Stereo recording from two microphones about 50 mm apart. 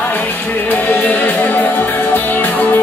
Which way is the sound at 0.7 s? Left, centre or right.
Left.